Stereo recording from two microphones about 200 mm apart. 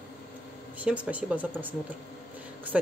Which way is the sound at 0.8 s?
5° right (ahead or behind).